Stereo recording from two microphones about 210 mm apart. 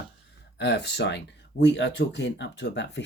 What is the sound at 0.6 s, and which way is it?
Speech, 55° left (ahead or behind).